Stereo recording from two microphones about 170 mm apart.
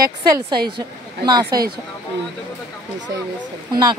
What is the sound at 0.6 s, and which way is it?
Speech, 70° right (ahead or behind).